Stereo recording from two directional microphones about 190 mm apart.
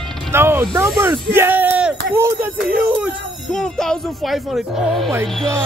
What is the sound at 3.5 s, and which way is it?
Speech, 5° left (ahead or behind).